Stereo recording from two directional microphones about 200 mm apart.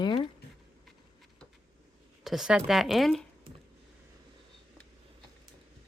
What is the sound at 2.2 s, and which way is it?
Speech, centre (ahead or behind).